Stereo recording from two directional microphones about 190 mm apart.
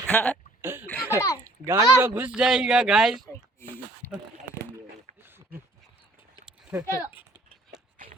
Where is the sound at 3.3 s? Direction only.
10° left (ahead or behind).